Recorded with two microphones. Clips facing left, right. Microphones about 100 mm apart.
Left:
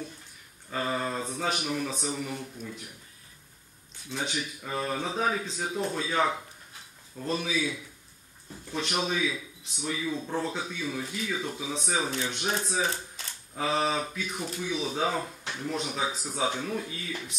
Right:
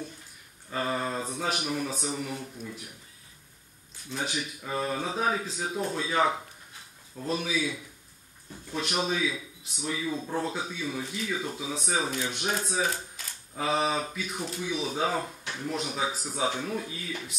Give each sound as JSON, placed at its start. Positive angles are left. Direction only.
{"t": 0.7, "sound": "speech", "side_deg": 0}
{"t": 4.1, "sound": "speech", "side_deg": -5}
{"t": 9.1, "sound": "speech", "side_deg": -5}
{"t": 12.8, "sound": "speech", "side_deg": 30}
{"t": 13.6, "sound": "speech", "side_deg": -5}